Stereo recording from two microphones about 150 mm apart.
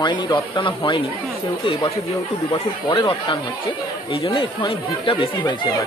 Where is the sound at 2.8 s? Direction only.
35° left (ahead or behind).